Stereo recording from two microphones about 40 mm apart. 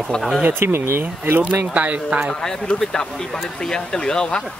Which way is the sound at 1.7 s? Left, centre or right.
Right.